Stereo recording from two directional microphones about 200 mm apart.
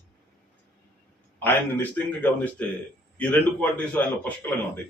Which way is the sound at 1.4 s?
10° left (ahead or behind).